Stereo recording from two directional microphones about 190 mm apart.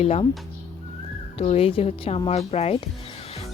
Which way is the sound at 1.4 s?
30° left (ahead or behind).